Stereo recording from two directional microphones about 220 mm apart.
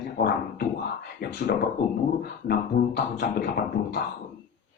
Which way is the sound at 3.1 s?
50° left (ahead or behind).